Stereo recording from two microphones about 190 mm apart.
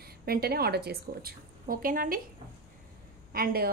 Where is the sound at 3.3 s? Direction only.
50° right (ahead or behind).